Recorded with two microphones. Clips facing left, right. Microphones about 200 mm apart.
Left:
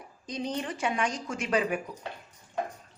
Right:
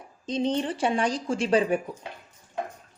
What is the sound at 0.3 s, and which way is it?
Speech, 25° right (ahead or behind).